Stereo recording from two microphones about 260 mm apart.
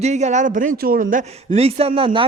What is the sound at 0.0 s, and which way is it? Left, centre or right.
Speech, right.